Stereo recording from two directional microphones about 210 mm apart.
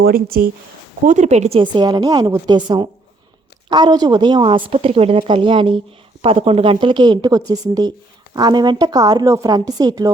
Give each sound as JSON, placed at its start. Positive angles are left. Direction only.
{"t": 0.0, "sound": "speech", "side_deg": -45}
{"t": 1.0, "sound": "speech", "side_deg": -35}